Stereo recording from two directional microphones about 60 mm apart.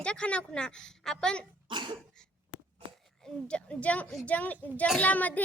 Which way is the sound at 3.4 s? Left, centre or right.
Left.